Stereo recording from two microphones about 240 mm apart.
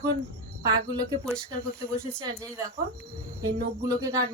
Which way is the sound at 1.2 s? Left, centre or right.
Centre.